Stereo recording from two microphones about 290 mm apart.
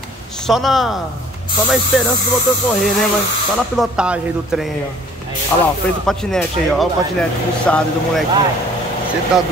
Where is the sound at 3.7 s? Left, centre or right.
Centre.